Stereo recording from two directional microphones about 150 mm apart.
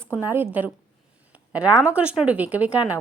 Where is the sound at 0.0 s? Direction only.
15° right (ahead or behind).